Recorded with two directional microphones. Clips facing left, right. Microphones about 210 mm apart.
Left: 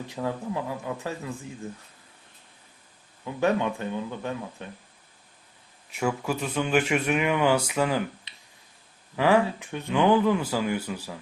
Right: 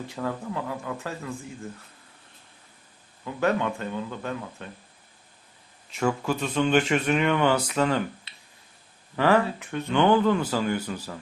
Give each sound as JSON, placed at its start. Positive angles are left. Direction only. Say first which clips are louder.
{"t": 0.1, "sound": "a man's voice", "louder": "left 2 dB", "side_deg": 15}
{"t": 3.2, "sound": "speech", "louder": "even", "side_deg": 15}
{"t": 5.9, "sound": "speech", "louder": "right 2 dB", "side_deg": 5}